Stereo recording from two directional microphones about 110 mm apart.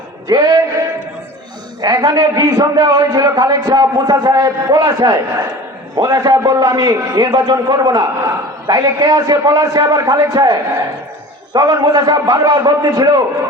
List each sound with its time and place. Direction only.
0.3 s a man's voice: 35° right (ahead or behind)
1.8 s a man's voice: 35° right (ahead or behind)